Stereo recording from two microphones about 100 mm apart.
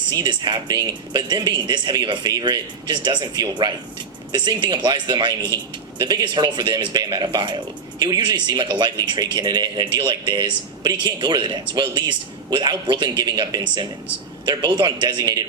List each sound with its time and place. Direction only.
0.1 s a man's voice: 50° right (ahead or behind)